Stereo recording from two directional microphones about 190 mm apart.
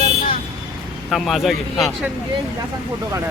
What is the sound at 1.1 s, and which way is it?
Speech, centre (ahead or behind).